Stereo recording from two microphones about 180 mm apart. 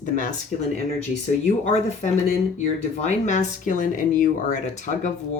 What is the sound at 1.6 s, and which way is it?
Speech, 40° left (ahead or behind).